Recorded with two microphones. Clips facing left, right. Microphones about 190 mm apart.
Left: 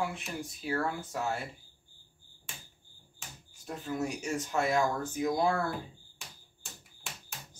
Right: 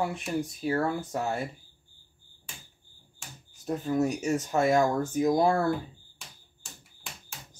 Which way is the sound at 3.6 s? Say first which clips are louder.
Right 8 dB; 40° right (ahead or behind).